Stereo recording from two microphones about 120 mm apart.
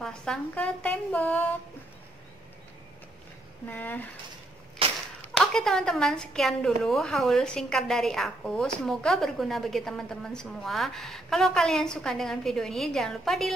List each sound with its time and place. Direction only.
0.0 s a woman's voice: 5° left (ahead or behind)
3.6 s a woman's voice: 15° left (ahead or behind)
4.8 s a sound: 50° right (ahead or behind)
5.3 s a woman's voice: 5° left (ahead or behind)